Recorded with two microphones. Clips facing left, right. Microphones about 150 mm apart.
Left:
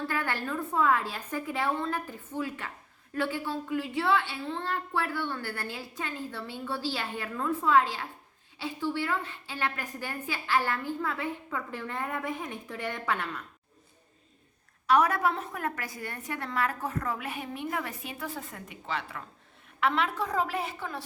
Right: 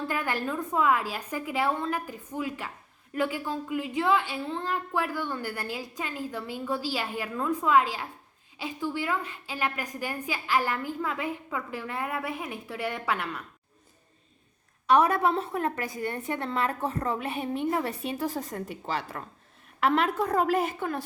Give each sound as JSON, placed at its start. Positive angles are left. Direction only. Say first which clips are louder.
{"t": 0.1, "sound": "a woman's voice", "louder": "right 2 dB", "side_deg": -15}
{"t": 14.8, "sound": "a woman's voice", "louder": "right 2 dB", "side_deg": -25}